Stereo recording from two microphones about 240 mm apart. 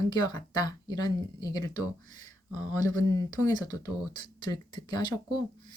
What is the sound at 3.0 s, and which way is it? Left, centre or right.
Speech, centre.